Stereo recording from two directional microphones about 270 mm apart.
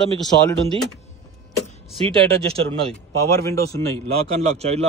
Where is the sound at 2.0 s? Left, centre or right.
Centre.